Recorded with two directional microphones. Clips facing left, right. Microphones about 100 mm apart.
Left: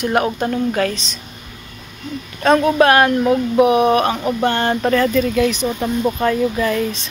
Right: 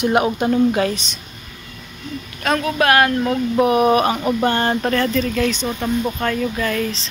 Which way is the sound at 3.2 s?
10° left (ahead or behind).